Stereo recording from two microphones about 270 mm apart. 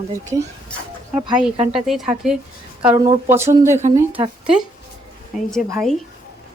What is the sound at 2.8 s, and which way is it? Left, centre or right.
Speech, centre.